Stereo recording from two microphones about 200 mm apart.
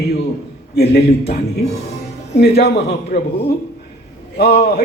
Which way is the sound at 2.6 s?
55° left (ahead or behind).